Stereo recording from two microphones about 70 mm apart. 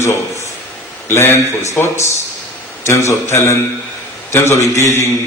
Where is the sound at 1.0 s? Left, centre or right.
Left.